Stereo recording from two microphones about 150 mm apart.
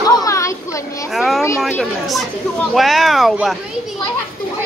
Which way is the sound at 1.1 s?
Centre (ahead or behind).